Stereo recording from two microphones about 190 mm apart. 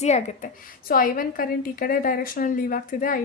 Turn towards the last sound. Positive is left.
turn(degrees=45)  # may be behind; listen again after turning